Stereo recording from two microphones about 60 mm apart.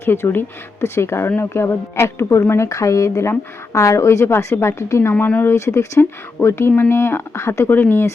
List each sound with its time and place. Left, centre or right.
0.0 s a woman's voice: left
4.3 s a woman's voice: left
6.0 s speech: left